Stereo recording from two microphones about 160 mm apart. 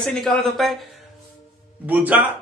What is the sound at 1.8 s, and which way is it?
Speech, 10° right (ahead or behind).